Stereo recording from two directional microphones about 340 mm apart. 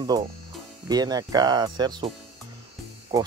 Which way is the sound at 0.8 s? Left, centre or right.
Centre.